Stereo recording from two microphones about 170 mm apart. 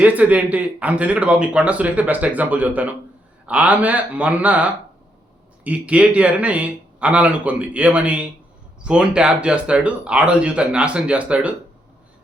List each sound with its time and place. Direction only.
0.0 s speech: 10° right (ahead or behind)